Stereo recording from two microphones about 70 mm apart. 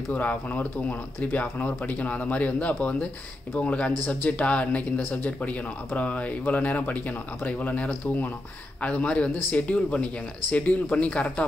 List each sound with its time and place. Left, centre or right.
0.1 s speech: left